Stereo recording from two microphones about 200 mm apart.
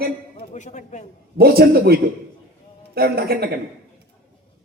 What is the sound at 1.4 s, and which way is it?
A man's voice, 50° right (ahead or behind).